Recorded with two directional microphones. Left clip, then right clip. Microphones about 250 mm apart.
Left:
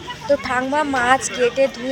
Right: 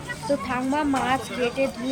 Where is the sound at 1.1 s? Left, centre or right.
Left.